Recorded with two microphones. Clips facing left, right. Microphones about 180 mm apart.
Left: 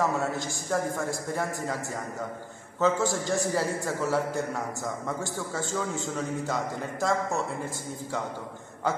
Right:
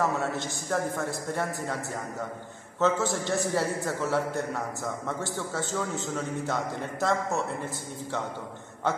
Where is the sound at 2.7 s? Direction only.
Centre (ahead or behind).